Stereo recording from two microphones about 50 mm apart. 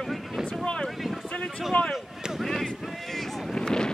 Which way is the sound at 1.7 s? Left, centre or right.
Left.